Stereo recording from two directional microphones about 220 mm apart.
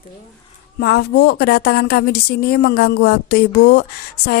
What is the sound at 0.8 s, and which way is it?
Speech, 45° left (ahead or behind).